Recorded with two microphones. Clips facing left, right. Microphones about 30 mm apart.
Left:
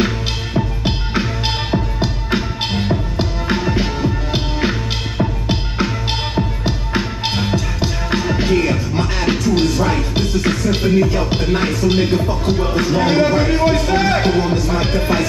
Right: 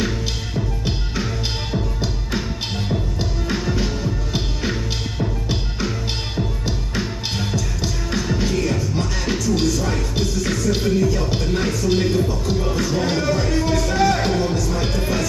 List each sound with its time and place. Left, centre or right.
0.6 s music: left